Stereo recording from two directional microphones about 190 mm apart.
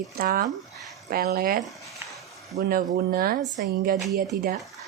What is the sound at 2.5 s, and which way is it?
A woman's voice, 50° right (ahead or behind).